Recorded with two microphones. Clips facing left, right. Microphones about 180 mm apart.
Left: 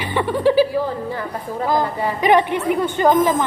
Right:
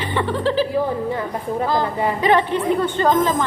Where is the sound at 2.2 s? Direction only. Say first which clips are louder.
Left 3 dB; 15° left (ahead or behind).